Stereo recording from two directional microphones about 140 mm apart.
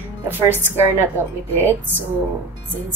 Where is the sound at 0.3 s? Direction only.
15° right (ahead or behind).